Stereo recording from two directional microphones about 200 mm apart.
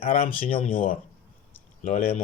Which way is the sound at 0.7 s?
45° left (ahead or behind).